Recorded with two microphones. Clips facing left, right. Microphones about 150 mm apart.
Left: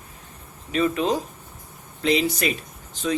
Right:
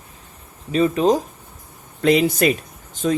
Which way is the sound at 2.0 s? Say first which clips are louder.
Right 6 dB; 50° right (ahead or behind).